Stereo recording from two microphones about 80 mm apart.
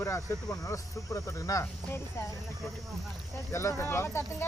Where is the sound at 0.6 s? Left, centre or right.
Left.